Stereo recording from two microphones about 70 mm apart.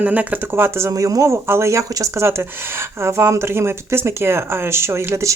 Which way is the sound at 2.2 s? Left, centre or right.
Right.